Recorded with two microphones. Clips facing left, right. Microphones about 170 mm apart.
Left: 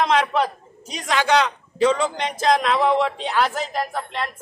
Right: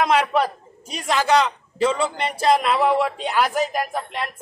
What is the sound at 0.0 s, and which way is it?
A man's voice, 10° right (ahead or behind).